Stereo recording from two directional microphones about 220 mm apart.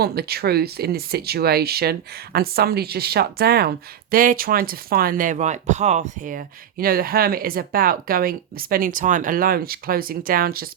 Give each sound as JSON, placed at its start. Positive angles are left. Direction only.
{"t": 0.0, "sound": "speech", "side_deg": -45}